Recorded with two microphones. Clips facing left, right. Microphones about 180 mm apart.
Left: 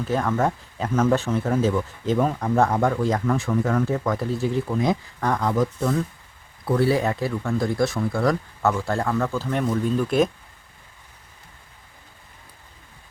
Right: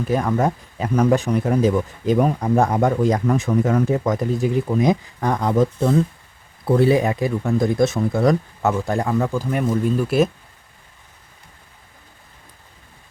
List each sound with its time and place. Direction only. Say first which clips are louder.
0.0 s speech: right 3 dB; 10° right (ahead or behind)